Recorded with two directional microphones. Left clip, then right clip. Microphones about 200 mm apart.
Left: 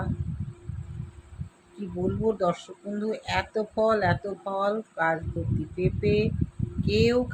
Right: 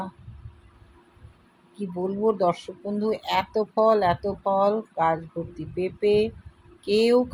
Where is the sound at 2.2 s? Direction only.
15° right (ahead or behind).